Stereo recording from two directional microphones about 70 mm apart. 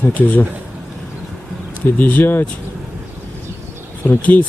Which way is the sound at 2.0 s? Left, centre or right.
Left.